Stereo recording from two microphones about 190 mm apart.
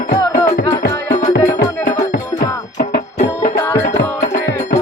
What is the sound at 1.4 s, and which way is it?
Music, 40° left (ahead or behind).